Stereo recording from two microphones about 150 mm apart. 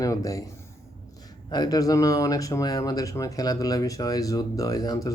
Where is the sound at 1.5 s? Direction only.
25° left (ahead or behind).